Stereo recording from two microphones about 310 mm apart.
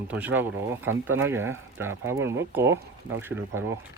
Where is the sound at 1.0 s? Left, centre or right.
Right.